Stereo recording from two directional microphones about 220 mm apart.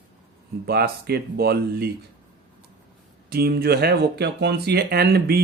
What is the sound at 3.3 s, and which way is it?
Speech, 45° right (ahead or behind).